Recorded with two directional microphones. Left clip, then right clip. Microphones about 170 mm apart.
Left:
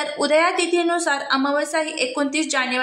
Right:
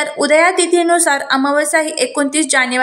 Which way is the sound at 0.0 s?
20° right (ahead or behind).